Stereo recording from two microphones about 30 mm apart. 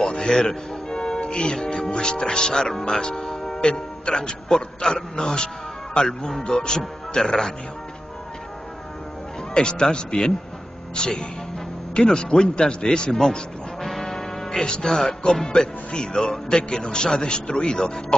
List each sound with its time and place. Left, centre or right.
0.0 s music: left
2.0 s speech: left
3.0 s speech: left
3.3 s music: centre
3.6 s speech: left
9.5 s speech: left
13.8 s music: centre
15.3 s speech: centre